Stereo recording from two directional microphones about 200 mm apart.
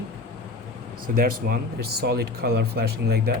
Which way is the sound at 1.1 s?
45° right (ahead or behind).